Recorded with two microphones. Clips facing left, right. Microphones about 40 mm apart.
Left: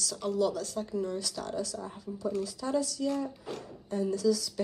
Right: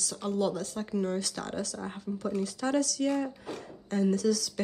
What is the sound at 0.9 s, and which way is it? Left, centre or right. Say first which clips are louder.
Speech: right 4 dB; right.